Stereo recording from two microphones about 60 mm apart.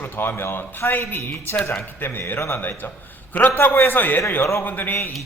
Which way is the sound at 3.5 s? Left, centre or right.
Left.